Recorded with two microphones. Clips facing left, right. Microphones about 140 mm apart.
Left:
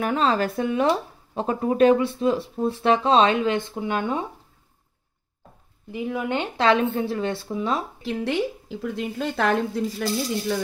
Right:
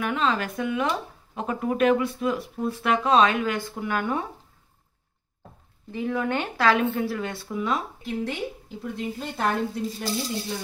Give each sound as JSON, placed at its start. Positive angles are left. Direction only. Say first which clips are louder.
{"t": 0.0, "sound": "speech", "louder": "left 4 dB", "side_deg": 35}
{"t": 5.9, "sound": "speech", "louder": "even", "side_deg": 15}
{"t": 8.0, "sound": "a woman's voice", "louder": "left 5 dB", "side_deg": 90}